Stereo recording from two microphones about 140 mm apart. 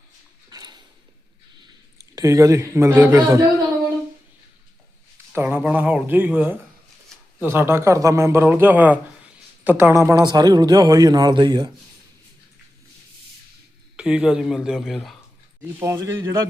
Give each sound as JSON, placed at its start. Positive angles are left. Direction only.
{"t": 0.5, "sound": "a sound", "side_deg": -30}
{"t": 2.1, "sound": "speech", "side_deg": -25}
{"t": 5.3, "sound": "a man's voice", "side_deg": -15}
{"t": 10.2, "sound": "speech", "side_deg": -30}
{"t": 13.9, "sound": "a man's voice", "side_deg": -5}
{"t": 15.8, "sound": "speech", "side_deg": -20}